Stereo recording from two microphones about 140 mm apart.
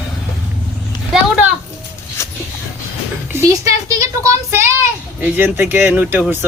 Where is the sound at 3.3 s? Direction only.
20° right (ahead or behind).